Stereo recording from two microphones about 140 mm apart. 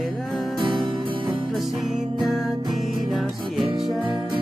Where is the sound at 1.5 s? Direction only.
Centre (ahead or behind).